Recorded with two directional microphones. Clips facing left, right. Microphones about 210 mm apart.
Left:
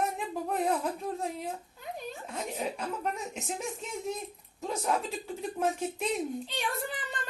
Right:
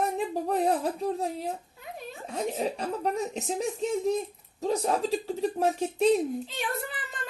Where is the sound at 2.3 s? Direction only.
35° right (ahead or behind).